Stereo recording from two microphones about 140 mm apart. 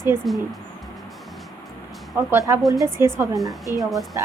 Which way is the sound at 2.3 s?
20° right (ahead or behind).